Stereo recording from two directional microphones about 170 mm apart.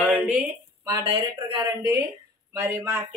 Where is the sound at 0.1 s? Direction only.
10° right (ahead or behind).